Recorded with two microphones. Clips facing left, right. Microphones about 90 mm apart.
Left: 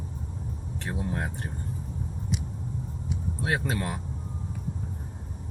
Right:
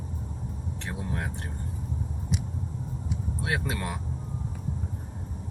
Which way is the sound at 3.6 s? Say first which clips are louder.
Left 2 dB; 30° left (ahead or behind).